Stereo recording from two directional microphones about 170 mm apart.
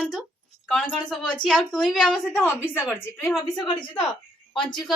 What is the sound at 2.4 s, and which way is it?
Speech, 15° left (ahead or behind).